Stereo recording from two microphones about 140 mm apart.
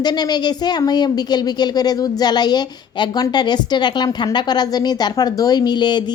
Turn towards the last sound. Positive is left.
turn(degrees=30)  # may be behind; listen again after turning